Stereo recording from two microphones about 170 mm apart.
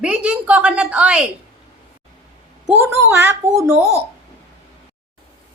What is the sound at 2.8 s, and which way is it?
Speech, 15° right (ahead or behind).